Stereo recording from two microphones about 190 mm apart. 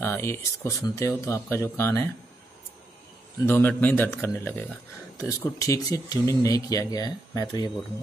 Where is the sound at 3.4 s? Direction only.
10° left (ahead or behind).